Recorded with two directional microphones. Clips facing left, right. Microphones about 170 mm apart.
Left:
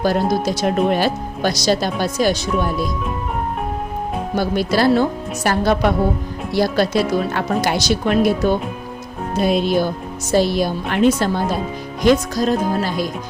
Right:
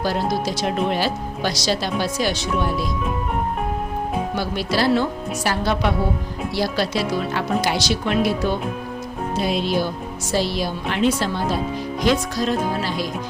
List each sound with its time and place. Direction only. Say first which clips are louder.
0.0 s speech: left 4 dB; 50° left (ahead or behind)
4.4 s speech: left 7 dB; 45° left (ahead or behind)